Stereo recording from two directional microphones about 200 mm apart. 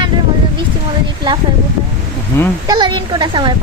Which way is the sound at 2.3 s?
10° left (ahead or behind).